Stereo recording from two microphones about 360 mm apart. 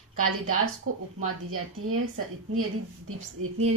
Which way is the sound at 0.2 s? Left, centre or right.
Right.